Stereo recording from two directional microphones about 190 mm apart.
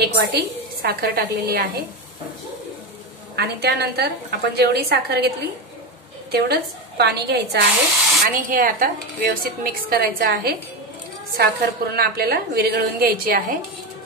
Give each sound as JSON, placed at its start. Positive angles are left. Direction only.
{"t": 0.0, "sound": "a woman's voice", "side_deg": -60}
{"t": 3.3, "sound": "a woman's voice", "side_deg": -60}
{"t": 6.3, "sound": "a woman's voice", "side_deg": -60}
{"t": 8.3, "sound": "a woman's voice", "side_deg": -45}